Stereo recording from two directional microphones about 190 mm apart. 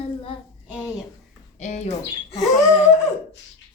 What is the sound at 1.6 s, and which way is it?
Bird, 35° left (ahead or behind).